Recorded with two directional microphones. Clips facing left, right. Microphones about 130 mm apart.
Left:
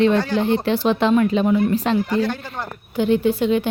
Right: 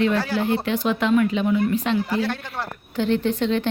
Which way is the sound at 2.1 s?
5° right (ahead or behind).